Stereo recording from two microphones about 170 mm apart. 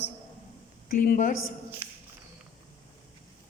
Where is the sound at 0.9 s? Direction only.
55° left (ahead or behind).